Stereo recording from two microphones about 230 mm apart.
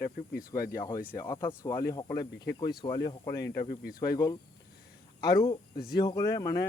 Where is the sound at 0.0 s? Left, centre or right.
Left.